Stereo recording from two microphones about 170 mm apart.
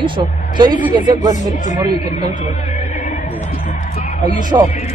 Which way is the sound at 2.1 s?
40° left (ahead or behind).